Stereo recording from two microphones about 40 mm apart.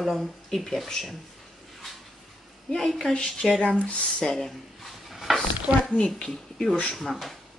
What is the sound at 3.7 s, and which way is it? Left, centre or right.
Speech, left.